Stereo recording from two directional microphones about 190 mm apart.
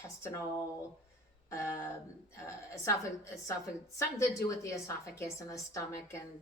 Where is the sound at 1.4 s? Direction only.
15° left (ahead or behind).